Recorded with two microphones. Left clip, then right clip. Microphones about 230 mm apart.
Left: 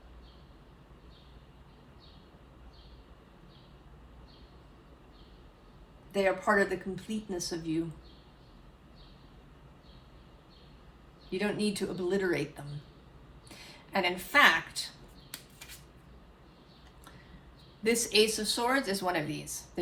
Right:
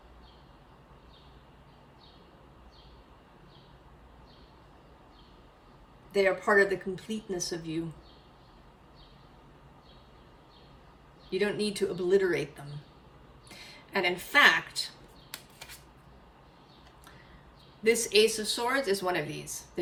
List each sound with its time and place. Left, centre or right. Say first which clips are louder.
6.2 s speech: right 2 dB; centre
11.3 s speech: right 3 dB; centre
17.8 s speech: right 3 dB; centre